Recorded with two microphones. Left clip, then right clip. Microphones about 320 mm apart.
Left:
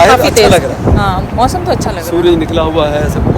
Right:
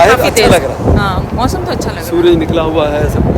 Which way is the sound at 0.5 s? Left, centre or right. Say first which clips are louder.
Even; centre.